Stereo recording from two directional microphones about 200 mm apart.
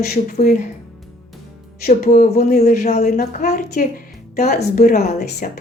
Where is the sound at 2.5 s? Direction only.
35° left (ahead or behind).